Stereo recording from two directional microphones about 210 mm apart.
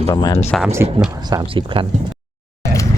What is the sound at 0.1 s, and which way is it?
Speech, 20° left (ahead or behind).